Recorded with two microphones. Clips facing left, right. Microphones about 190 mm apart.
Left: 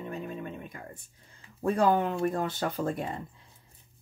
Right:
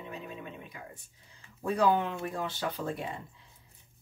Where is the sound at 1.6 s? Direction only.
50° left (ahead or behind).